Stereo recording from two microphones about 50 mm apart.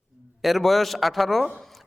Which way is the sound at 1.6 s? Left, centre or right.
Centre.